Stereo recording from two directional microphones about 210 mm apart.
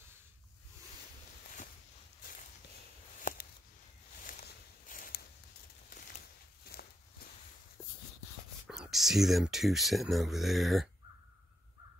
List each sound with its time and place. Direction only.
3.3 s a sound: 40° left (ahead or behind)
6.6 s walk: 45° left (ahead or behind)
8.6 s speech: 5° right (ahead or behind)